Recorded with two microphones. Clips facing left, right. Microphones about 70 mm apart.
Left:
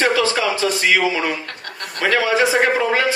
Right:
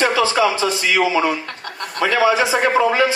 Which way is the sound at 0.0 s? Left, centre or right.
Right.